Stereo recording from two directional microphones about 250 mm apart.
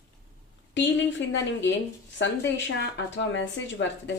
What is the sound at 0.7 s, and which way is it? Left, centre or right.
Speech, left.